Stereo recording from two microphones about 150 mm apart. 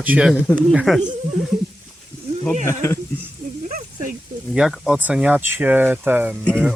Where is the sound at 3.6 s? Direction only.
60° right (ahead or behind).